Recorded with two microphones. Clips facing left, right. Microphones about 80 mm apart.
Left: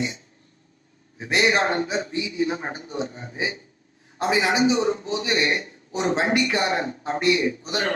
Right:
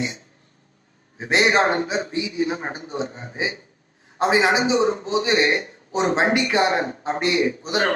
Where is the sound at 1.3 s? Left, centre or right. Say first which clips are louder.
Right 3 dB; right.